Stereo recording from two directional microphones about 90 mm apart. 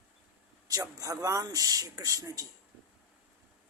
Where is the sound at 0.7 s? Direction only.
40° right (ahead or behind).